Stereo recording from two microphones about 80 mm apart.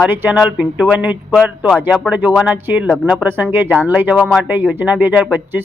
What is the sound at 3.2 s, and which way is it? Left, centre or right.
Speech, right.